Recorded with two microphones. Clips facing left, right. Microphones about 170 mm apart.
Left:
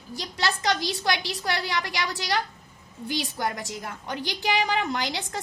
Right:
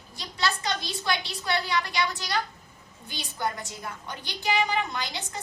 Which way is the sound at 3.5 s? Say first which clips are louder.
Left 3 dB; 85° left.